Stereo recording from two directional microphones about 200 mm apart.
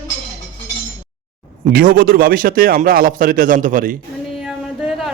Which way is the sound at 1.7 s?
45° right (ahead or behind).